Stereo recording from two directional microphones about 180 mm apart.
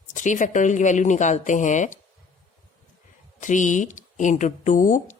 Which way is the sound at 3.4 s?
45° left (ahead or behind).